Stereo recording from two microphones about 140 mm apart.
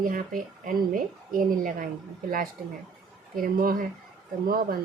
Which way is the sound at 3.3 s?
90° right.